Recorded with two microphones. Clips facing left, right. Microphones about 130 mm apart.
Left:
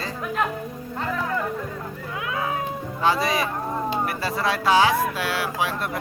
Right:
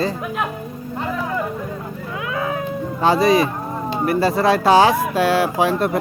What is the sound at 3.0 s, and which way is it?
Speech, 35° right (ahead or behind).